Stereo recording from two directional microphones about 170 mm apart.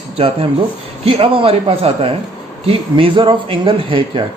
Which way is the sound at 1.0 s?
35° right (ahead or behind).